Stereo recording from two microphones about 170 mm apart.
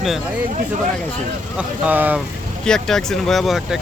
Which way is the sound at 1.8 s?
10° right (ahead or behind).